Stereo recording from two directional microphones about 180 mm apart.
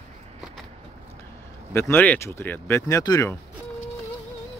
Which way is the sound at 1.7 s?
10° left (ahead or behind).